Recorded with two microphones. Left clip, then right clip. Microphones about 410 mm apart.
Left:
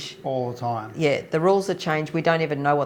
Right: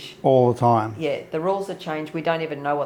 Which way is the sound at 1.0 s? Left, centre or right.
Left.